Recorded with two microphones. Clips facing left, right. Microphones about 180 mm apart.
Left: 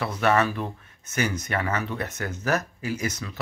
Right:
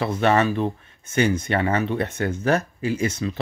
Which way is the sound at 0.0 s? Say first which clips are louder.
Right 3 dB; 25° right (ahead or behind).